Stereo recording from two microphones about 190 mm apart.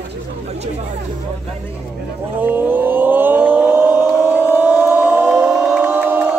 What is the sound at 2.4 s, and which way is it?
Vehicle, 10° right (ahead or behind).